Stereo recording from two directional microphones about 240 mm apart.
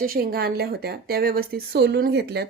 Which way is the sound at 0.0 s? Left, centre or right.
Right.